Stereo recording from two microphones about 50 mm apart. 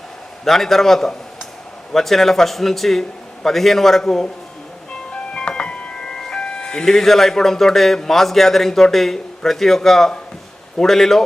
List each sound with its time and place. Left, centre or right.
0.4 s a man's voice: centre
5.1 s music: centre
6.1 s speech: centre